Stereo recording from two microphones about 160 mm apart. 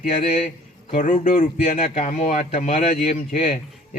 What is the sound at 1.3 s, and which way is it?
Speech, 40° left (ahead or behind).